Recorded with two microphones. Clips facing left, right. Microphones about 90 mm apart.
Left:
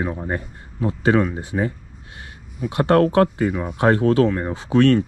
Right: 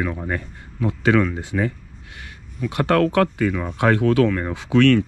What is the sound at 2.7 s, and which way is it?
A man's voice, 25° left (ahead or behind).